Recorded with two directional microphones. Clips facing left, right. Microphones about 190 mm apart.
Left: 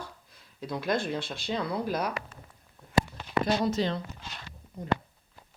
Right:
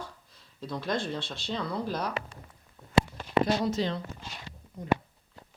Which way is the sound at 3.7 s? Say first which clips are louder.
Left 1 dB; 50° left (ahead or behind).